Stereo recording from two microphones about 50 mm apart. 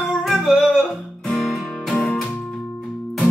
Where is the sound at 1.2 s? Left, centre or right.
Centre.